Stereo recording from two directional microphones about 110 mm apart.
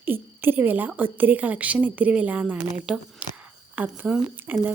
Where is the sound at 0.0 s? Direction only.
20° right (ahead or behind).